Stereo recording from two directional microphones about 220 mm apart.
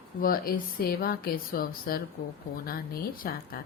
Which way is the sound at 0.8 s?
45° left (ahead or behind).